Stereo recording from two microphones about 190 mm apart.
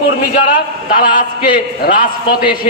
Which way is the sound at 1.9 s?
45° left (ahead or behind).